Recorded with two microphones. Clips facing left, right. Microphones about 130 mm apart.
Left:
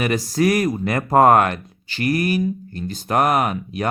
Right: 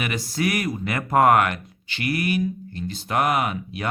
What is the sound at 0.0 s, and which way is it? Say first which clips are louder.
Speech: left 6 dB; 40° left (ahead or behind).